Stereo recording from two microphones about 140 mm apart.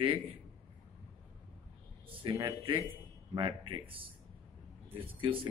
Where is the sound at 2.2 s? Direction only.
35° right (ahead or behind).